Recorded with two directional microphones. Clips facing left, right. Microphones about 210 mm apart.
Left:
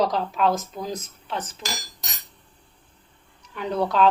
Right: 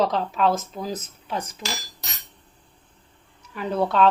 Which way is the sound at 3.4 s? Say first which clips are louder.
Right 1 dB; 5° right (ahead or behind).